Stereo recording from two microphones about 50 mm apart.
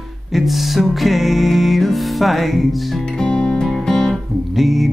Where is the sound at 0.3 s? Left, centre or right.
Centre.